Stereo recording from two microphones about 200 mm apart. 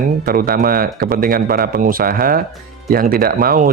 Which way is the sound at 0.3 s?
45° right (ahead or behind).